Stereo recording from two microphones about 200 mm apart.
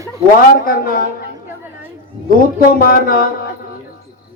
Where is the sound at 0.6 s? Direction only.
45° left (ahead or behind).